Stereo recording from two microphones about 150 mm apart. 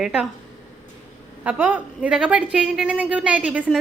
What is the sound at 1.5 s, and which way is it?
A woman's voice, 10° right (ahead or behind).